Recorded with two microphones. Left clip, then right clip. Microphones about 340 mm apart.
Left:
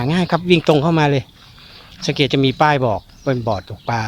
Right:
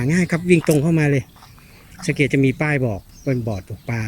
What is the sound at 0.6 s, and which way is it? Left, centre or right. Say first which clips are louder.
Speech: left 4 dB; left.